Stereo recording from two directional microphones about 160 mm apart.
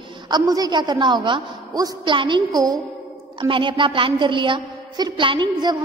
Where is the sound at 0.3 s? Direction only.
25° right (ahead or behind).